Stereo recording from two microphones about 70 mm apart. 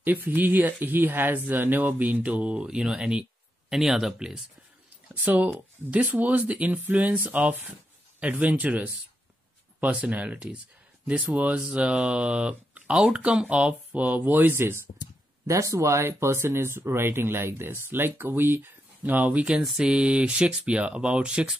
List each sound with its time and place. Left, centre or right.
0.0 s speech: right; by 4.4 s centre
5.1 s speech: right
15.4 s speech: right
16.0 s speech: right; by 21.5 s centre